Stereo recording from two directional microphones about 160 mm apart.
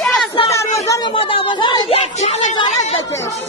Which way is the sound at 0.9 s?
30° left (ahead or behind).